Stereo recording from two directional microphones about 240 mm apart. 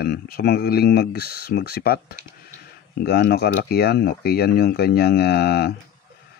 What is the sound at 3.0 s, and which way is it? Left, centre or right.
Speech, left.